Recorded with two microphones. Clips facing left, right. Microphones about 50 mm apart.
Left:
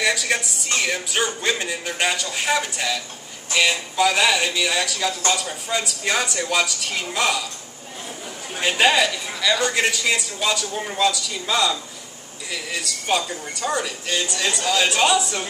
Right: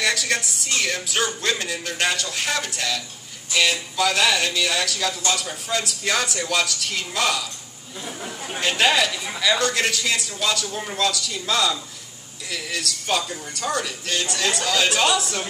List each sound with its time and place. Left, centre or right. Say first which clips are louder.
0.0 s a woman's voice: left 1 dB; centre
8.5 s speech: left 2 dB; centre